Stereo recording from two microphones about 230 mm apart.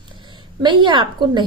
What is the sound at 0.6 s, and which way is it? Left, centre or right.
Speech, centre.